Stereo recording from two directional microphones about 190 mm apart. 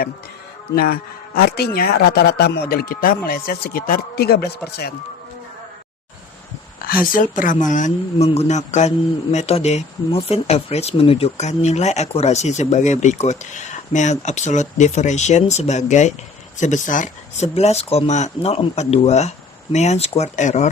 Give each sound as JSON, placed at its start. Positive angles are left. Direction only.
{"t": 1.4, "sound": "speech", "side_deg": 55}
{"t": 7.1, "sound": "speech", "side_deg": 45}